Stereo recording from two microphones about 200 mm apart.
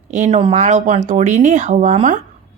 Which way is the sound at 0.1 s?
35° right (ahead or behind).